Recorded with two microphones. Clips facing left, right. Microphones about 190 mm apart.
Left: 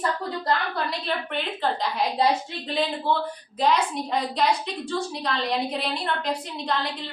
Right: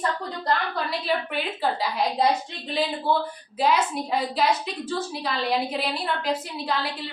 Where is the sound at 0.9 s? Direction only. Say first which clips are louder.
Right 2 dB; 5° right (ahead or behind).